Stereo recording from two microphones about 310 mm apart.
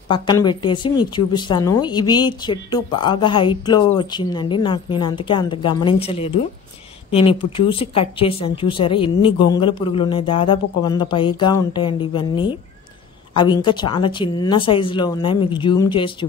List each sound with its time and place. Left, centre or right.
0.1 s a woman's voice: centre